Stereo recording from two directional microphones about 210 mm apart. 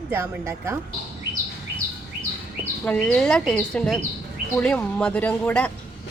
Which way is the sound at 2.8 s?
5° left (ahead or behind).